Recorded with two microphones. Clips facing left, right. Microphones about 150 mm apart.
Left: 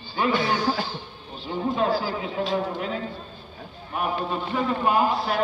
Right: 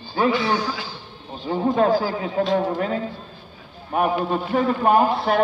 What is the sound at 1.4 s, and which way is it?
A man's voice, 45° right (ahead or behind).